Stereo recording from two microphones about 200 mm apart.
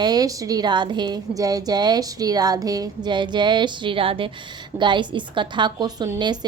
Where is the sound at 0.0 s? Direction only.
20° right (ahead or behind).